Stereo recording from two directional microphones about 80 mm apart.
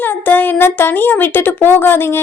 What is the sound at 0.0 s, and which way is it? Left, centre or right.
Speech, left.